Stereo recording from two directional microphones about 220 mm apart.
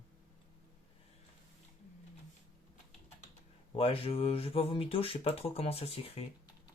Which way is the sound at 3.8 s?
25° left (ahead or behind).